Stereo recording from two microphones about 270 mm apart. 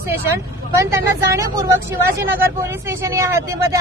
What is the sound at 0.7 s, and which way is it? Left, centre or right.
Speech, centre.